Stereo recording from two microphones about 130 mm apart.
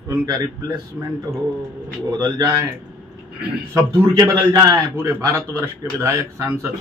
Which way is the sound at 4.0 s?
30° right (ahead or behind).